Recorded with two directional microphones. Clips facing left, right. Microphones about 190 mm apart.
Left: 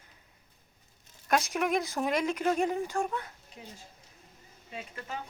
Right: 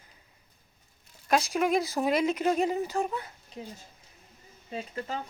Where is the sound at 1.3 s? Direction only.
Centre (ahead or behind).